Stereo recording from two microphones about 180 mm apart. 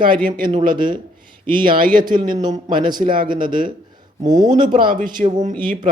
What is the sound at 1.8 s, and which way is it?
Speech, 50° right (ahead or behind).